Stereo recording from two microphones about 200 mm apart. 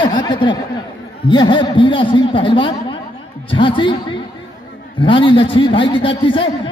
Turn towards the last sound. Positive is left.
turn(degrees=25)  # may be behind; listen again after turning